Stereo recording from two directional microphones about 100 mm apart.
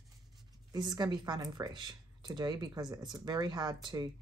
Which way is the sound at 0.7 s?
45° right (ahead or behind).